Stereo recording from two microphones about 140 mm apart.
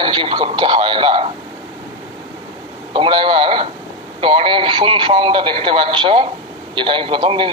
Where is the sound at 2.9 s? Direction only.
40° right (ahead or behind).